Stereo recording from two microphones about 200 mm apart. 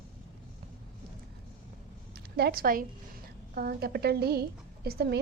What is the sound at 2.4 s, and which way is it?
A woman's voice, 50° right (ahead or behind).